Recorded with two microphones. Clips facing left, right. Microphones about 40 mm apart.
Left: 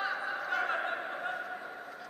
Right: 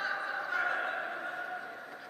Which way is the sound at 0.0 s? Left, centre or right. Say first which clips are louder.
Even; centre.